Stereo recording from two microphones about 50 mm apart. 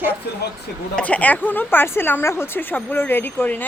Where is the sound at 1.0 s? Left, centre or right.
Left.